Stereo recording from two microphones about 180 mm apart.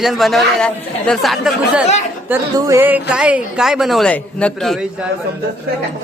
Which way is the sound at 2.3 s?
15° right (ahead or behind).